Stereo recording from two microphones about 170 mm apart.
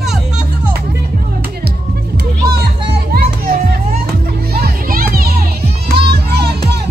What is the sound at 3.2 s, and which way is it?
Music, 60° right (ahead or behind).